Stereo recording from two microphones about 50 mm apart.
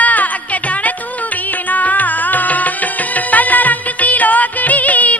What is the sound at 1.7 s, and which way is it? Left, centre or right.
Music, left.